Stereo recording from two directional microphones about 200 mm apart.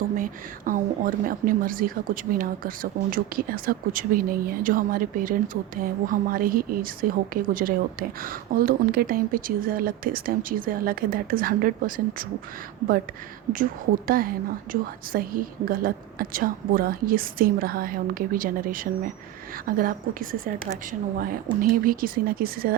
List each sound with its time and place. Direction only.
0.2 s speech: 45° right (ahead or behind)
14.1 s speech: 45° right (ahead or behind)